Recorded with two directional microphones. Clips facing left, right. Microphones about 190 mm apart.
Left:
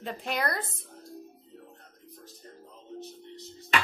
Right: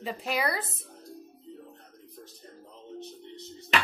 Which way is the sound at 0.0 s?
5° right (ahead or behind).